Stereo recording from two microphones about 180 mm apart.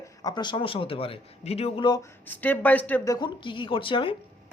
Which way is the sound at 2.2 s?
10° left (ahead or behind).